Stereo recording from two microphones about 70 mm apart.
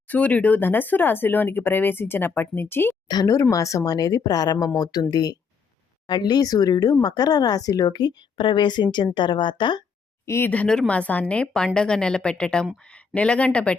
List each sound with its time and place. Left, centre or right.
0.1 s speech: left
3.5 s a woman's voice: left
6.1 s a woman's voice: left
10.2 s speech: left
10.7 s a woman's voice: centre